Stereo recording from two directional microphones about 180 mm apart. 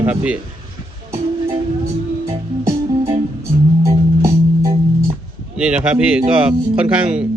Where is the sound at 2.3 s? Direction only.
15° right (ahead or behind).